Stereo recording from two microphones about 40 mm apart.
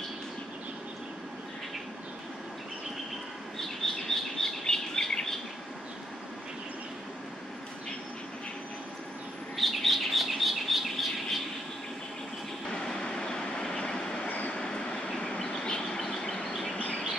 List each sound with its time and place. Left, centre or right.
3.5 s bird: centre
9.6 s bird: centre
12.6 s train: centre
14.2 s train: left
14.5 s vehicle: centre